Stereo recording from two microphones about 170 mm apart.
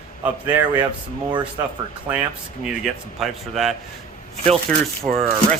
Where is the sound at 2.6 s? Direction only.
Centre (ahead or behind).